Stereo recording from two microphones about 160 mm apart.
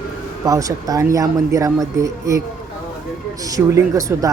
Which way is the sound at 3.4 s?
20° right (ahead or behind).